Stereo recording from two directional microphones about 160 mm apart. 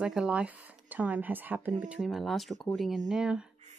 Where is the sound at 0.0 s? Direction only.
5° right (ahead or behind).